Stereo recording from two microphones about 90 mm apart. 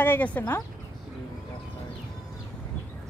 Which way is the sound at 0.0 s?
20° left (ahead or behind).